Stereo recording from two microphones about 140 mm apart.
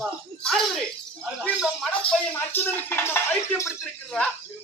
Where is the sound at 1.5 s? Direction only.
5° right (ahead or behind).